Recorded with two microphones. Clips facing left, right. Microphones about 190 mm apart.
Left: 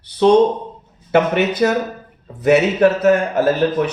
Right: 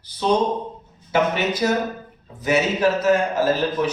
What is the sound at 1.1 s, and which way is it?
A man's voice, 60° left (ahead or behind).